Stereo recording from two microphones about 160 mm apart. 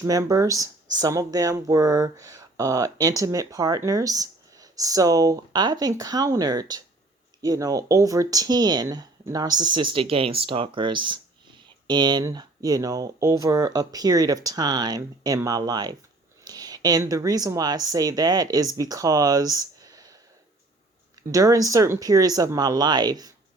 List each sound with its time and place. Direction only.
0.0 s speech: 20° right (ahead or behind)
21.3 s speech: 20° right (ahead or behind)